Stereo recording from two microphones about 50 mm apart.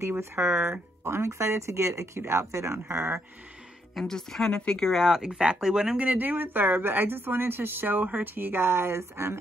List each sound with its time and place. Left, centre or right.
0.0 s speech: right
4.0 s a woman's voice: centre
4.9 s speech: centre
5.3 s speech: centre
5.9 s a woman's voice: right